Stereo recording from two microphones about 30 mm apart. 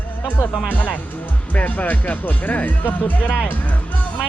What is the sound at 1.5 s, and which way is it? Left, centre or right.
Speech, left.